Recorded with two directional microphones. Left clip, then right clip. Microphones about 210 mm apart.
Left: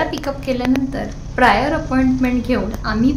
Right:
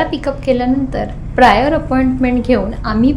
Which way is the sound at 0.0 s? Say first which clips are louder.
Right 4 dB; 20° right (ahead or behind).